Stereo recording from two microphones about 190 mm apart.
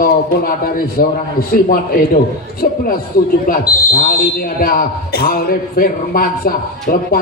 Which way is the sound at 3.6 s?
20° left (ahead or behind).